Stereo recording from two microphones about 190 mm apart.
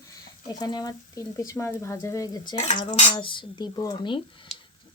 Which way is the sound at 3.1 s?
25° left (ahead or behind).